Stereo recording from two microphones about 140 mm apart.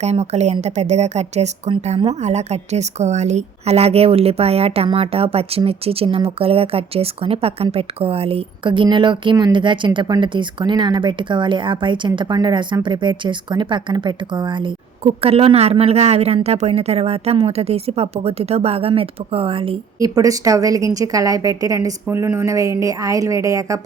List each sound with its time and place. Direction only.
0.0 s a woman's voice: 50° right (ahead or behind)
20.0 s a woman's voice: 25° right (ahead or behind)